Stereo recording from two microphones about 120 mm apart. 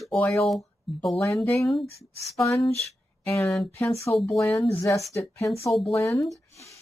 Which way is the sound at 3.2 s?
25° left (ahead or behind).